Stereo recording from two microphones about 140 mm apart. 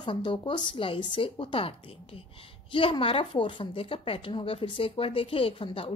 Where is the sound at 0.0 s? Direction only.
35° left (ahead or behind).